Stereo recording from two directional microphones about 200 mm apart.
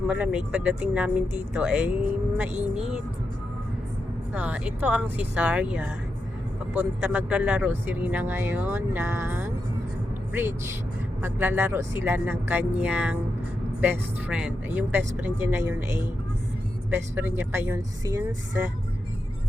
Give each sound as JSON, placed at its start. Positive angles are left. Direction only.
{"t": 0.1, "sound": "speech", "side_deg": -5}
{"t": 4.4, "sound": "speech", "side_deg": -5}
{"t": 16.9, "sound": "speech", "side_deg": -10}